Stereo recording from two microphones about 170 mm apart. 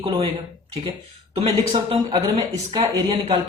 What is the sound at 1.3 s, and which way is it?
A man's voice, 35° right (ahead or behind).